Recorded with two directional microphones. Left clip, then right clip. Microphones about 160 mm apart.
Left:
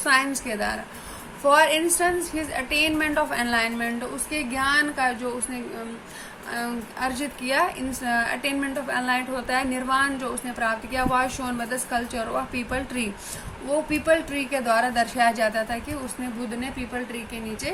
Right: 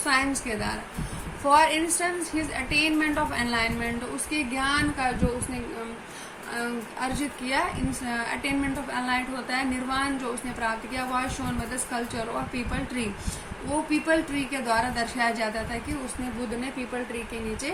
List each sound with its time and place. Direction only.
0.0 s a woman's voice: 55° left (ahead or behind)
6.6 s a woman's voice: 60° left (ahead or behind)
14.1 s a woman's voice: 55° left (ahead or behind)